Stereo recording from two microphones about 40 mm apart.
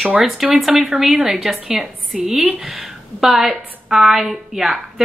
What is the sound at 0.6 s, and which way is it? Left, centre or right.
Speech, right.